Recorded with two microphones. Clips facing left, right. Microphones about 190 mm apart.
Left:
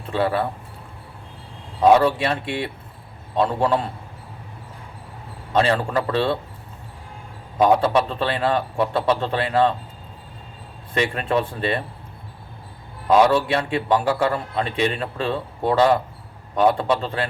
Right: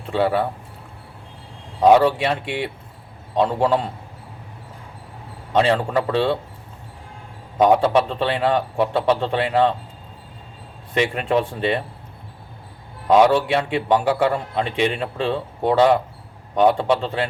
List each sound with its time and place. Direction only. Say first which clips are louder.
0.2 s a man's voice: right 2 dB; 15° right (ahead or behind)
1.8 s a man's voice: right 1 dB; 15° right (ahead or behind)
5.5 s a man's voice: right 2 dB; 15° right (ahead or behind)
7.6 s a man's voice: right 1 dB; 15° right (ahead or behind)
10.9 s a man's voice: right 2 dB; 10° right (ahead or behind)
13.1 s a man's voice: right 1 dB; 15° right (ahead or behind)